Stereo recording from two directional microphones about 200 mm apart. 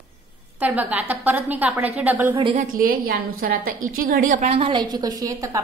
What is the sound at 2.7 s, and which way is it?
A woman's voice, 45° right (ahead or behind).